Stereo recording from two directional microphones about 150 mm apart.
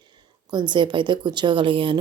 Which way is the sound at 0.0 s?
30° right (ahead or behind).